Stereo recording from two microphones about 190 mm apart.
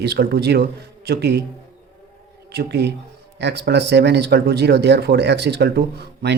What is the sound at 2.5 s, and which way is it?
Speech, 60° right (ahead or behind).